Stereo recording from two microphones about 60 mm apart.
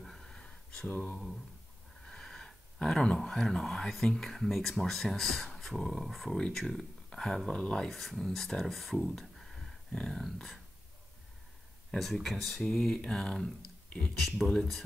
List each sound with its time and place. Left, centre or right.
0.0 s a sound: centre
0.8 s speech: left
2.0 s speech: centre
7.3 s mantra: centre
7.9 s speech: centre
9.9 s mantra: centre
12.0 s speech: centre
12.7 s mantra: centre
14.1 s speech: centre